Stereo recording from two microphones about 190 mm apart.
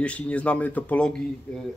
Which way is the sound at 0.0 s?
5° left (ahead or behind).